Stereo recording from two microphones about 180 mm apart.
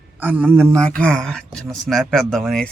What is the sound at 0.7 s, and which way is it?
Speech, 5° left (ahead or behind).